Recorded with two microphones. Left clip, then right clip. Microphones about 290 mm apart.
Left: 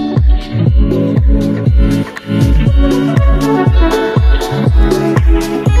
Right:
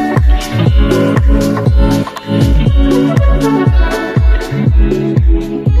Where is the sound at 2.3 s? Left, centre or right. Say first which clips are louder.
Right 1 dB; centre.